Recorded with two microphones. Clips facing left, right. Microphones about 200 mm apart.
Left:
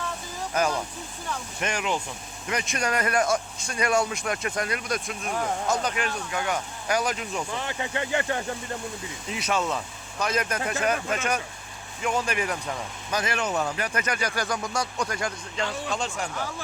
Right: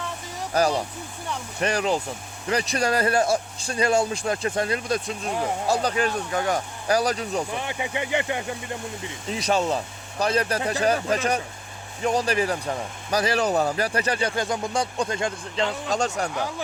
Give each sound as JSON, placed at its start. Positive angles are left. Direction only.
{"t": 0.5, "sound": "speech", "side_deg": -35}
{"t": 7.5, "sound": "speech", "side_deg": -15}
{"t": 9.3, "sound": "speech", "side_deg": -35}
{"t": 15.9, "sound": "speech", "side_deg": -40}